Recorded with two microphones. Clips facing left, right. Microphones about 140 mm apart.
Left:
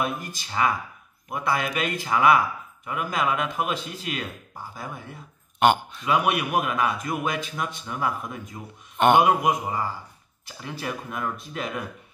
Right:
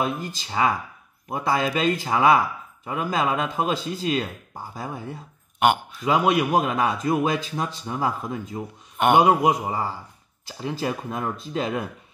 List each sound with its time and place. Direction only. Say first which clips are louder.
0.0 s speech: right 2 dB; 25° right (ahead or behind)
5.6 s speech: left 1 dB; 10° right (ahead or behind)
6.0 s speech: right 3 dB; 30° right (ahead or behind)
8.9 s a sound: even; 10° right (ahead or behind)
9.2 s speech: right 2 dB; 25° right (ahead or behind)